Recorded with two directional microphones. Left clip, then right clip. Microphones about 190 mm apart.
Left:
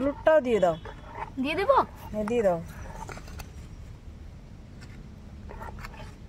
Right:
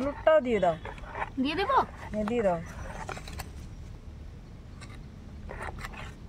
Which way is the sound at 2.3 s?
45° left (ahead or behind).